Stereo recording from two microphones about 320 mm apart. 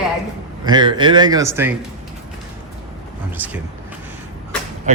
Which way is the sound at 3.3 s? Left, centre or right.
Centre.